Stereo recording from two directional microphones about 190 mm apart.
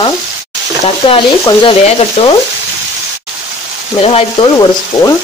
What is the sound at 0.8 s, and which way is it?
Speech, 30° left (ahead or behind).